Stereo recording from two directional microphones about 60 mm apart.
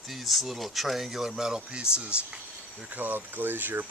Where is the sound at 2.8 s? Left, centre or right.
Right.